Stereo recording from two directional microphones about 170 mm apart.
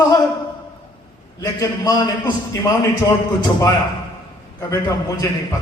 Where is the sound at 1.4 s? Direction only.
20° left (ahead or behind).